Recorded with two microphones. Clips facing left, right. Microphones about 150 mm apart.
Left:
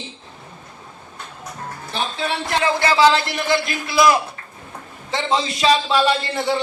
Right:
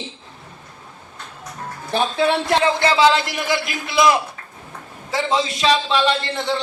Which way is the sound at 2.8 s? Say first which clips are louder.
Even; 15° right (ahead or behind).